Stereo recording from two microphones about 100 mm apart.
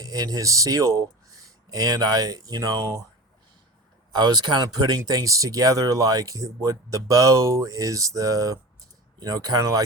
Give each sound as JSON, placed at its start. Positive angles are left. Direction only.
{"t": 0.0, "sound": "speech", "side_deg": -40}
{"t": 4.1, "sound": "speech", "side_deg": -45}